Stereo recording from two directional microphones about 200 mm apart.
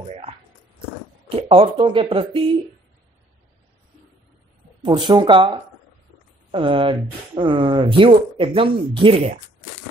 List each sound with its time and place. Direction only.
1.3 s speech: 25° right (ahead or behind)
4.8 s speech: 25° right (ahead or behind)